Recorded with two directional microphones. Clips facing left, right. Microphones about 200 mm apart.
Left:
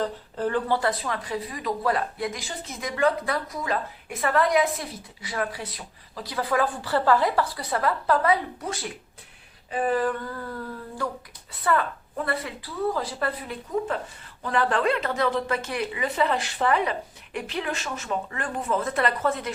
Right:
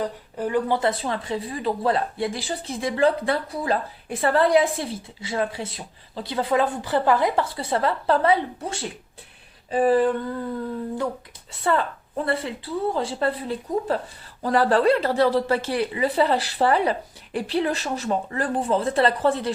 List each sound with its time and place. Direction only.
0.0 s a woman's voice: 10° right (ahead or behind); by 19.5 s 30° right (ahead or behind)